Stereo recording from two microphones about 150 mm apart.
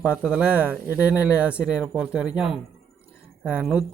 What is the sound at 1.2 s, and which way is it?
Speech, 10° right (ahead or behind).